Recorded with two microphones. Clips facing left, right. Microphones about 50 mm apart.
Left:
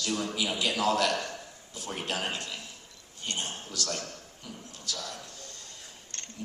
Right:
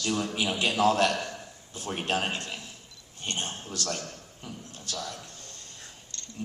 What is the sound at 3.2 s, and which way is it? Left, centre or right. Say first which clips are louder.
Speech: right 2 dB; right.